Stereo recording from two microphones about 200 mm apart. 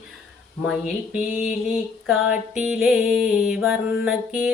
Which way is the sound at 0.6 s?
5° right (ahead or behind).